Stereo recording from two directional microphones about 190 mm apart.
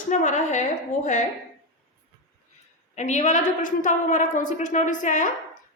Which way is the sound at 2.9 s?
40° left (ahead or behind).